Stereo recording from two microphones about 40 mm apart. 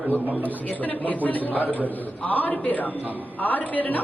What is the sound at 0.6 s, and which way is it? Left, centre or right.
A woman's voice, left.